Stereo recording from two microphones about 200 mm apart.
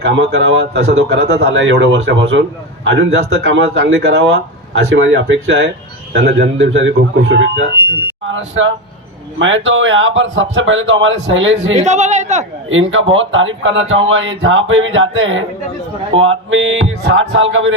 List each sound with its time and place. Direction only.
0.0 s speech: 60° right (ahead or behind)
11.7 s a man's voice: 35° right (ahead or behind)
12.9 s speech: 75° right (ahead or behind)